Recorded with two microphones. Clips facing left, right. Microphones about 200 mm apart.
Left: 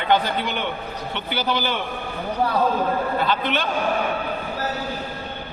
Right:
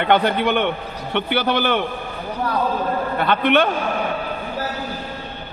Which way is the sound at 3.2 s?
60° right (ahead or behind).